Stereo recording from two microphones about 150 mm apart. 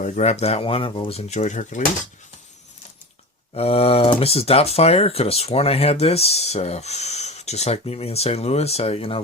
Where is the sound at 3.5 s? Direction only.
40° left (ahead or behind).